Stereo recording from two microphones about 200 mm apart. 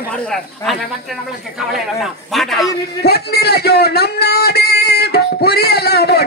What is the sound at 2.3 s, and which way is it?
Speech, centre (ahead or behind).